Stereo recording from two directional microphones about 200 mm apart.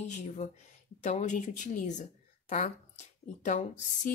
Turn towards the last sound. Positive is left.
turn(degrees=40)  # may be behind; listen again after turning